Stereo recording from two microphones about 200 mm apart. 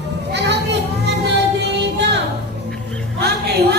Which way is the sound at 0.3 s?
60° right (ahead or behind).